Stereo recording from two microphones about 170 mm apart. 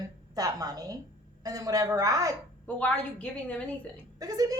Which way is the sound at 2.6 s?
10° left (ahead or behind).